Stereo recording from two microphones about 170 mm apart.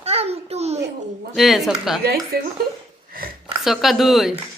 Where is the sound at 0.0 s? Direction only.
35° right (ahead or behind).